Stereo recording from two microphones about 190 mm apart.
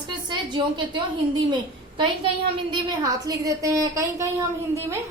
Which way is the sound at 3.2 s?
20° right (ahead or behind).